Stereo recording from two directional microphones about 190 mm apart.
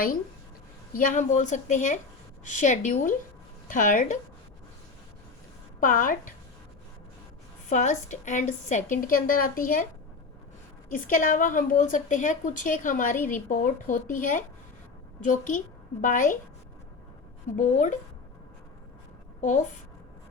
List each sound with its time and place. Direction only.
0.9 s a woman's voice: 40° left (ahead or behind)
5.8 s a woman's voice: 45° left (ahead or behind)
7.7 s a woman's voice: 40° left (ahead or behind)
10.9 s a woman's voice: 45° left (ahead or behind)
17.6 s speech: 40° left (ahead or behind)
19.4 s a woman's voice: 40° left (ahead or behind)